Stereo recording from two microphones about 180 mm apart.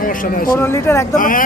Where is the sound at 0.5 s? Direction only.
15° left (ahead or behind).